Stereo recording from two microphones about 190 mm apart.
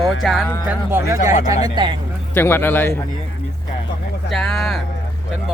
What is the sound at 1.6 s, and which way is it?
Speech, 25° right (ahead or behind).